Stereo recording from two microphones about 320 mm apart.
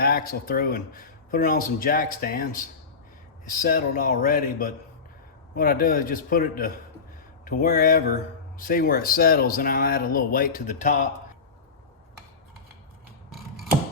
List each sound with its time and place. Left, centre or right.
0.0 s speech: left
3.6 s speech: left